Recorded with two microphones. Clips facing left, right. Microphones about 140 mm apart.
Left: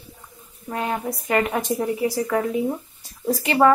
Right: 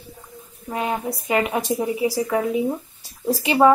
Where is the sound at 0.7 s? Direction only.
10° right (ahead or behind).